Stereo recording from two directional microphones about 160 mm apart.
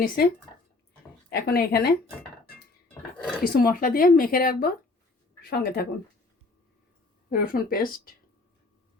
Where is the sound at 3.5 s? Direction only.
65° left (ahead or behind).